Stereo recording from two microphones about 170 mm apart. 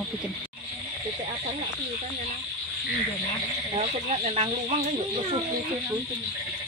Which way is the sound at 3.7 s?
40° right (ahead or behind).